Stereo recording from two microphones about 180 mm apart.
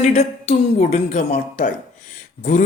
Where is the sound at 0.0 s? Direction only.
40° left (ahead or behind).